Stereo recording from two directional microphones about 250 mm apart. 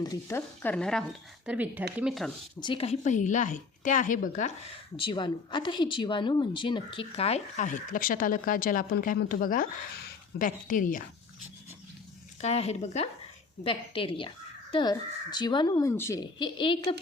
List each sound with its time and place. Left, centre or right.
0.0 s speech: centre
2.6 s speech: centre
4.9 s speech: centre
12.4 s speech: left